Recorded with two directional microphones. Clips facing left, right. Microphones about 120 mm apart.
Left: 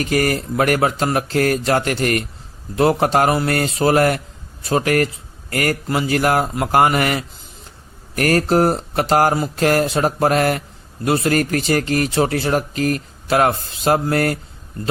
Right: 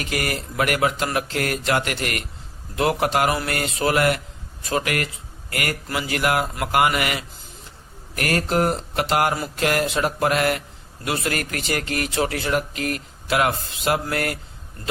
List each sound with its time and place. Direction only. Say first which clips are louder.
0.0 s a man's voice: left 8 dB; 40° left (ahead or behind)